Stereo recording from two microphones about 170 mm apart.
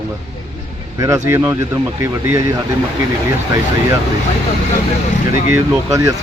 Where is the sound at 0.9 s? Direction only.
20° right (ahead or behind).